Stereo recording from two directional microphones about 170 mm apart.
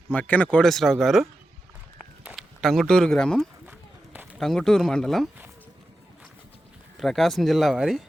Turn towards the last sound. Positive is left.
turn(degrees=0)  # may be behind; listen again after turning